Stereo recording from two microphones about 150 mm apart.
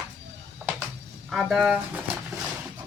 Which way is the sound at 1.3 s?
Centre (ahead or behind).